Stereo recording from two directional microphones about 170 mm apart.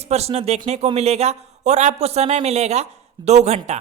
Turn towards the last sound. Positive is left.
turn(degrees=-40)  # may be behind; listen again after turning